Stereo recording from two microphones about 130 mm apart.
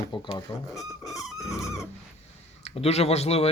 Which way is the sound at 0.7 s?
25° left (ahead or behind).